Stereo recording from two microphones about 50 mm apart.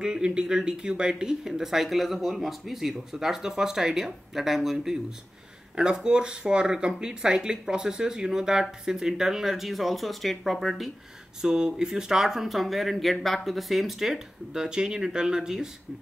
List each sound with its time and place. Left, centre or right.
0.0 s speech: centre
5.8 s speech: centre
11.4 s speech: centre